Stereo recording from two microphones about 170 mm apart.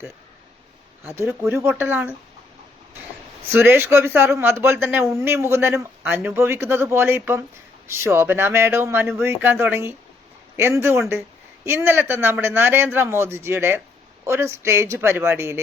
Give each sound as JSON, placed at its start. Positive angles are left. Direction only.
{"t": 1.0, "sound": "speech", "side_deg": -15}
{"t": 3.5, "sound": "speech", "side_deg": -10}